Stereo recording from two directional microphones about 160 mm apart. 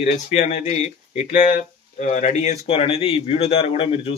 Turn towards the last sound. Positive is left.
turn(degrees=35)  # may be behind; listen again after turning